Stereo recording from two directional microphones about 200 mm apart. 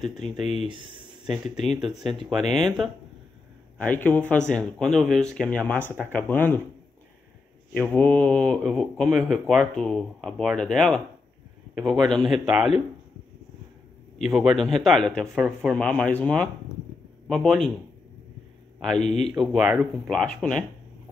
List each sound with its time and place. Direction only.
0.0 s speech: centre (ahead or behind)
0.7 s speech: 25° right (ahead or behind)
2.2 s speech: centre (ahead or behind)
7.7 s speech: 10° left (ahead or behind)
14.1 s speech: centre (ahead or behind)
18.9 s a man's voice: 35° left (ahead or behind)
19.3 s speech: 5° right (ahead or behind)